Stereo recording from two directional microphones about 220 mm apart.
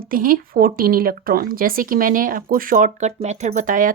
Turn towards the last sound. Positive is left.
turn(degrees=-35)  # may be behind; listen again after turning